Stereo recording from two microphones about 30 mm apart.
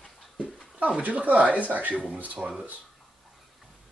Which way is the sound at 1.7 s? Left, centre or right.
Right.